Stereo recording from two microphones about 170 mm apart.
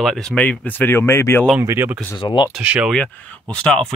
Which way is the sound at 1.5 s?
15° right (ahead or behind).